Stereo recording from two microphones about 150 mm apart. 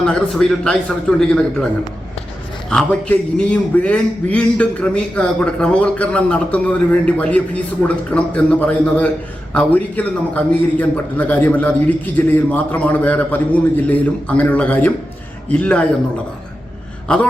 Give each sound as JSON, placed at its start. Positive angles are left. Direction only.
{"t": 0.0, "sound": "a man's voice", "side_deg": 5}
{"t": 2.6, "sound": "a man's voice", "side_deg": 5}